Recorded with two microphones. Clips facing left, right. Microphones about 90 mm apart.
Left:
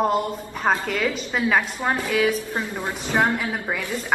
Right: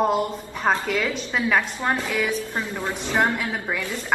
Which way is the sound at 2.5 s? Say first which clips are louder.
Even; 20° left (ahead or behind).